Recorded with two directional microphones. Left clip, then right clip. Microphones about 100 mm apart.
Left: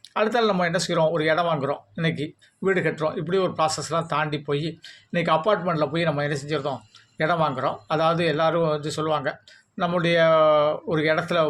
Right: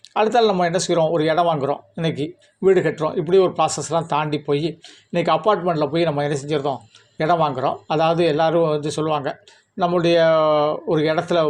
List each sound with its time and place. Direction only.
0.1 s speech: 30° right (ahead or behind)